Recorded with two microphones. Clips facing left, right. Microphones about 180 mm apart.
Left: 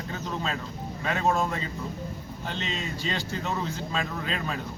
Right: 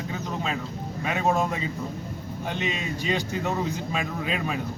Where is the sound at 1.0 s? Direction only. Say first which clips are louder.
Right 1 dB; 15° right (ahead or behind).